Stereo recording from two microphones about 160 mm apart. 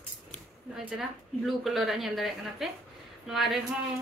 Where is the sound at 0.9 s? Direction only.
Centre (ahead or behind).